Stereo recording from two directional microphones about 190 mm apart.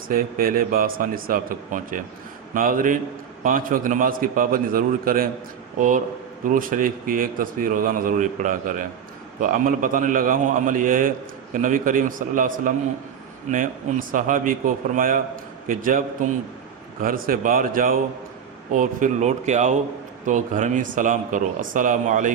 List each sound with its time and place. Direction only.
0.1 s a man's voice: 50° right (ahead or behind)
6.4 s a man's voice: 45° right (ahead or behind)